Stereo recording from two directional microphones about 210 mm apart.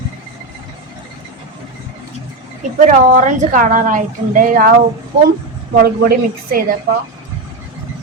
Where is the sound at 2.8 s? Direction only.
35° right (ahead or behind).